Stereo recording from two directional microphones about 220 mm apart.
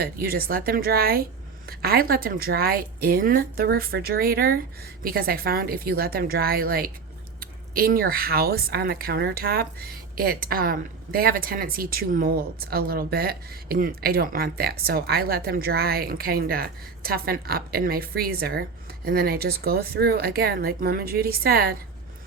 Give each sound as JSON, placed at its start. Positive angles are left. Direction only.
{"t": 0.0, "sound": "speech", "side_deg": -45}